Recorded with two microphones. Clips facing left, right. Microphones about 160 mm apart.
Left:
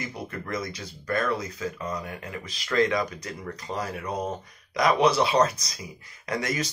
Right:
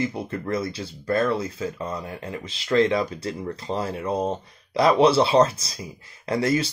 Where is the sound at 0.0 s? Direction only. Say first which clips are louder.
Right 8 dB; 30° right (ahead or behind).